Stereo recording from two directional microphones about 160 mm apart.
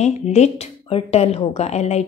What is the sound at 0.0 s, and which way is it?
A woman's voice, 45° left (ahead or behind).